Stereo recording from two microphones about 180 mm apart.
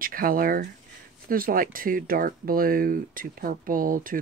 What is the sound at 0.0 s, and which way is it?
Speech, 50° right (ahead or behind).